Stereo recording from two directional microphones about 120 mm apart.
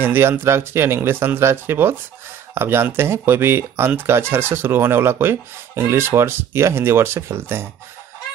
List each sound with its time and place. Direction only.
0.0 s speech: 20° right (ahead or behind)